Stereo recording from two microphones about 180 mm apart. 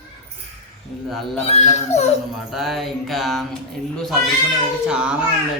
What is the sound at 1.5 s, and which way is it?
Speech, 35° left (ahead or behind).